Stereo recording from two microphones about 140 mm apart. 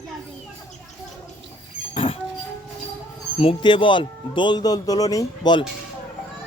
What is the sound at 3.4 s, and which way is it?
Speech, 40° left (ahead or behind).